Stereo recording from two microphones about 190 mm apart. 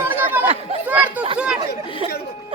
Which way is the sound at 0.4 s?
35° right (ahead or behind).